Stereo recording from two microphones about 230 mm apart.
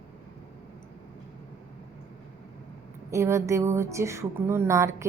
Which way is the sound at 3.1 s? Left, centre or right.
Centre.